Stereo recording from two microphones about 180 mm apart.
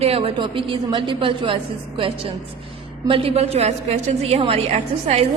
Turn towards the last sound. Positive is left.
turn(degrees=-40)  # may be behind; listen again after turning